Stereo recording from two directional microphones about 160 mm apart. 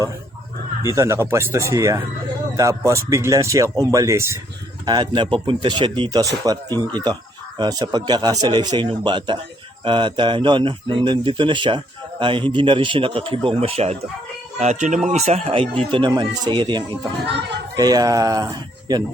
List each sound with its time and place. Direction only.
0.8 s speech: 20° right (ahead or behind)
4.9 s a man's voice: 30° right (ahead or behind)